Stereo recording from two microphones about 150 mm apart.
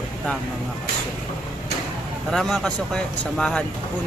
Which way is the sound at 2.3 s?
Centre (ahead or behind).